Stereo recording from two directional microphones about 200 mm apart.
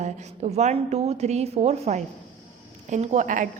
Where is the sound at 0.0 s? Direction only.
35° right (ahead or behind).